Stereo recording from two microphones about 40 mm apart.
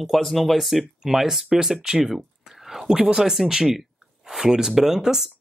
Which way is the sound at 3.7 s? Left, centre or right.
Centre.